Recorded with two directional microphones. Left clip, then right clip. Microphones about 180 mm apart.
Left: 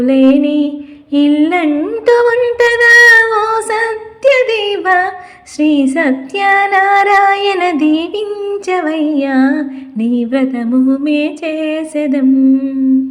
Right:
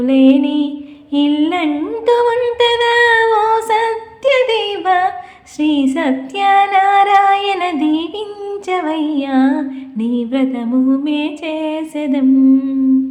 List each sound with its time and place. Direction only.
0.0 s music: 15° left (ahead or behind)
1.1 s a sound: 15° left (ahead or behind)
5.5 s child singing: 15° left (ahead or behind)
8.4 s music: 15° left (ahead or behind)